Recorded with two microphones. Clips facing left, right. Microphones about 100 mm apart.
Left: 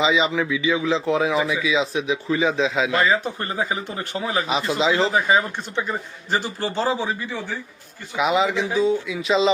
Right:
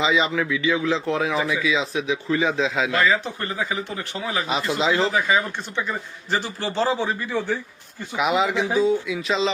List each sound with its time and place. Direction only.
0.0 s a man's voice: 5° left (ahead or behind)
3.1 s speech: 35° left (ahead or behind)
4.7 s a man's voice: 5° left (ahead or behind)
5.0 s speech: 30° left (ahead or behind)
6.3 s speech: 40° left (ahead or behind)
6.8 s a man's voice: 10° left (ahead or behind)